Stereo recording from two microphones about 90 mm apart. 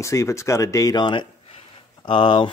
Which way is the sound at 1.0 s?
70° left (ahead or behind).